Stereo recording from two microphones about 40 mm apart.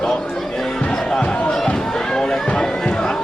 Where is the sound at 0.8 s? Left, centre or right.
Left.